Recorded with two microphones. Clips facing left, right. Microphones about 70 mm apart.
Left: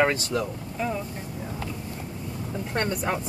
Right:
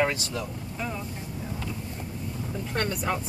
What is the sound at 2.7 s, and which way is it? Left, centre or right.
Speech, left.